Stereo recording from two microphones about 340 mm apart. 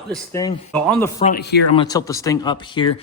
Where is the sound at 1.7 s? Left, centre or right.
Centre.